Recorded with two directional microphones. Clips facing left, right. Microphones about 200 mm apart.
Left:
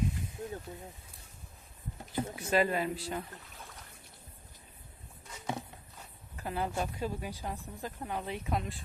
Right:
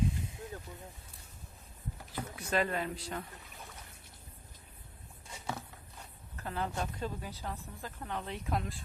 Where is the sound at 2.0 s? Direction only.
25° left (ahead or behind).